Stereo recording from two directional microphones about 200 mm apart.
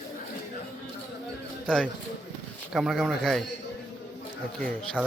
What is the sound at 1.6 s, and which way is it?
Speech, 5° left (ahead or behind).